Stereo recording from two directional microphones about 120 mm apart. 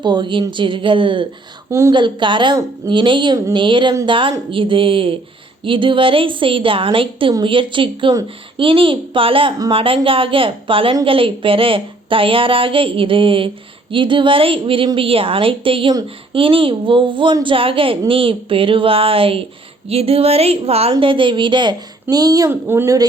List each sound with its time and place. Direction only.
0.0 s a woman's voice: 40° right (ahead or behind); by 20.9 s 55° right (ahead or behind)
20.9 s a woman's voice: 45° right (ahead or behind); by 23.0 s 25° right (ahead or behind)